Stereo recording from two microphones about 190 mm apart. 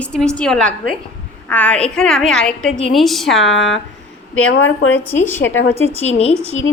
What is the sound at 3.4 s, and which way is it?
Speech, 85° left.